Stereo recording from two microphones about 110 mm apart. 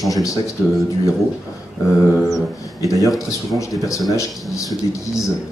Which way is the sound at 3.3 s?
30° left (ahead or behind).